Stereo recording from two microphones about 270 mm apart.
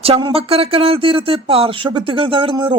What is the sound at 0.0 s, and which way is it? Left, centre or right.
Speech, centre.